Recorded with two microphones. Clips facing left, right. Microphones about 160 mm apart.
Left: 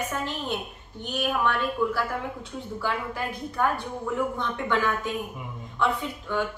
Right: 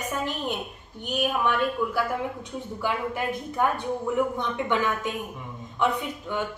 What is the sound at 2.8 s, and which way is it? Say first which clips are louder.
Speech: right 3 dB; 15° right (ahead or behind).